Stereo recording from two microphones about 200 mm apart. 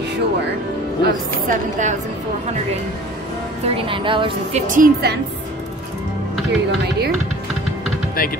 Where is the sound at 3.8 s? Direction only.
25° right (ahead or behind).